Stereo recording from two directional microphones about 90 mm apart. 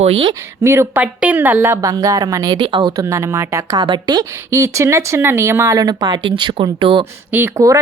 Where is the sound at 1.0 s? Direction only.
15° right (ahead or behind).